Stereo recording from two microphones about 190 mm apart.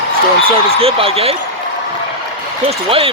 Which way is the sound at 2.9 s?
30° right (ahead or behind).